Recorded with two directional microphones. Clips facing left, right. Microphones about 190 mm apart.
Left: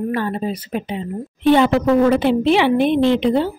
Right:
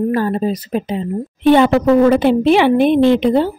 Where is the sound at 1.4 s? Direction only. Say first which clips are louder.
Right 3 dB; 55° right (ahead or behind).